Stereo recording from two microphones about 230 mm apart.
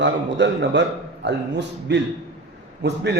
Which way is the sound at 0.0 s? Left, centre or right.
Right.